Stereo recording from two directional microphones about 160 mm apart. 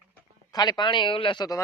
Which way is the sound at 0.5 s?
25° left (ahead or behind).